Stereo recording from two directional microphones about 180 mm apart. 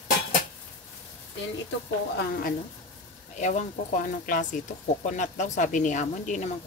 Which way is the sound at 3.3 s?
40° left (ahead or behind).